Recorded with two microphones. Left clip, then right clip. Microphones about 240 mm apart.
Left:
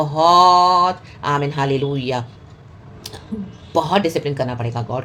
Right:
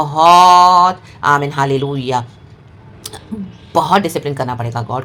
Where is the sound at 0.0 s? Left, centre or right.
Right.